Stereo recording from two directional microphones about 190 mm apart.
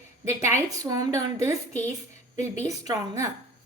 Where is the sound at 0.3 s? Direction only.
15° right (ahead or behind).